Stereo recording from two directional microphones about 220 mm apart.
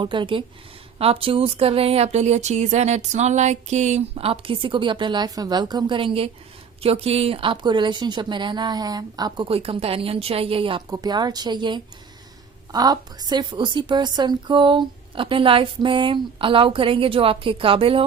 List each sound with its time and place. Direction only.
0.0 s speech: 20° right (ahead or behind)